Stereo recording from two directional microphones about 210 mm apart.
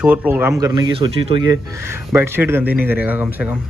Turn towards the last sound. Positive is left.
turn(degrees=-5)  # may be behind; listen again after turning